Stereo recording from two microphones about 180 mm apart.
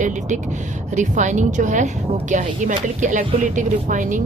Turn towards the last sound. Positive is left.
turn(degrees=-45)  # may be behind; listen again after turning